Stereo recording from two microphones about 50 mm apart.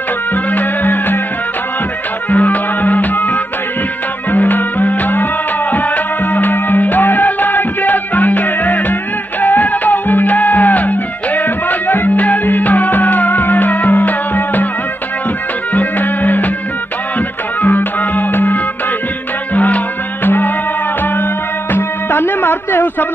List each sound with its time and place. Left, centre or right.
0.3 s music: left
2.3 s music: left
15.7 s music: left
17.6 s music: left
20.2 s music: left
21.7 s music: left